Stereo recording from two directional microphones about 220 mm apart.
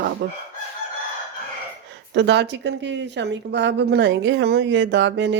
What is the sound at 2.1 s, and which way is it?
A woman's voice, 50° right (ahead or behind).